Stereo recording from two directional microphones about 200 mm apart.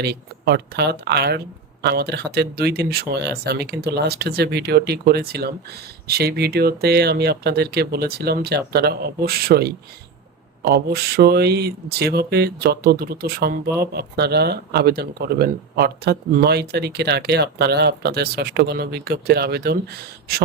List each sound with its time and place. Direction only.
0.0 s speech: 55° right (ahead or behind)